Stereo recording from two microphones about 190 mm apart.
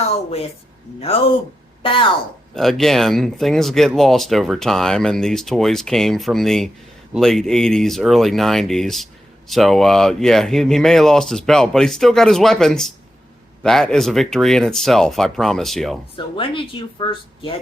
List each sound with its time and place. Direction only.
0.0 s a woman's voice: 30° left (ahead or behind)
2.6 s speech: centre (ahead or behind)
16.1 s speech: 25° left (ahead or behind)